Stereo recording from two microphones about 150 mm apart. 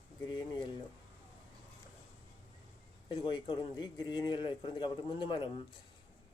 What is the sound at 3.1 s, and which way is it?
Speech, 30° left (ahead or behind).